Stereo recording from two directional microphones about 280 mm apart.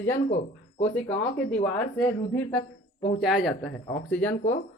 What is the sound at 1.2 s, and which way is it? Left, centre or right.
Speech, centre.